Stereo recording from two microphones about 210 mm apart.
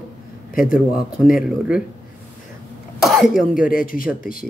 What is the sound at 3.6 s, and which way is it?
Speech, 40° left (ahead or behind).